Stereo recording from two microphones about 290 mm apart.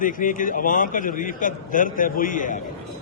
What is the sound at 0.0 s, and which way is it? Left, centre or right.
A man's voice, left.